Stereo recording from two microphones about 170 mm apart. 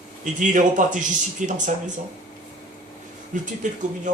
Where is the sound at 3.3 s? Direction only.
50° right (ahead or behind).